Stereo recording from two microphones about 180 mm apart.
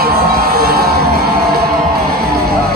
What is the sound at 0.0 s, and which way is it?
Music, 60° right (ahead or behind).